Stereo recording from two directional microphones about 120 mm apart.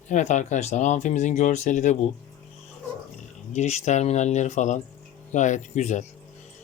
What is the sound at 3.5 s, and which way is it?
Speech, 75° left (ahead or behind).